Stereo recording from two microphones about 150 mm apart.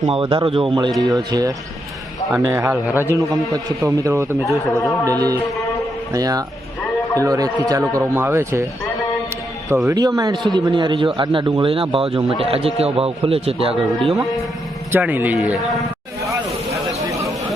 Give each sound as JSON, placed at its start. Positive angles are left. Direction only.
{"t": 0.0, "sound": "a man's voice", "side_deg": -35}
{"t": 0.9, "sound": "speech", "side_deg": -25}
{"t": 9.6, "sound": "a man's voice", "side_deg": -20}
{"t": 14.9, "sound": "speech", "side_deg": -10}
{"t": 17.1, "sound": "a sound", "side_deg": -20}